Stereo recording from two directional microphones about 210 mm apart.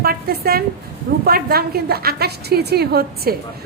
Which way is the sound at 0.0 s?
45° right (ahead or behind).